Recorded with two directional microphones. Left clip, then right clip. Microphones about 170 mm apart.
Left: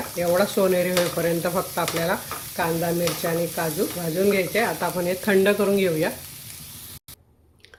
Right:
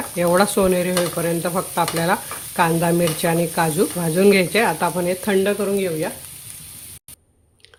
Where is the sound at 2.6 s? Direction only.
40° right (ahead or behind).